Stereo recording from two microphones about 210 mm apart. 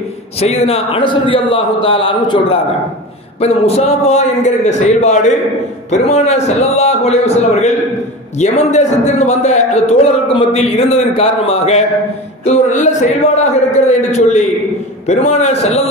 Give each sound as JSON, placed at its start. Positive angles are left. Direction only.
{"t": 0.4, "sound": "a man's voice", "side_deg": 30}